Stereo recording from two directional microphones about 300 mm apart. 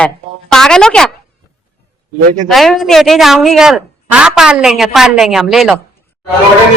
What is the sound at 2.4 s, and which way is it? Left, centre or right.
Speech, centre.